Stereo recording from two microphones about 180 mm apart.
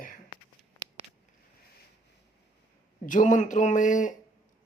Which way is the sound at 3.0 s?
45° left (ahead or behind).